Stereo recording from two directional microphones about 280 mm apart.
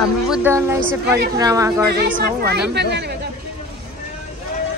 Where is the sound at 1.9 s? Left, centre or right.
Right.